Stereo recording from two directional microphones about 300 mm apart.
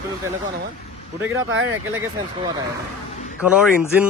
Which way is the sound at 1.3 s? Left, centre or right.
Right.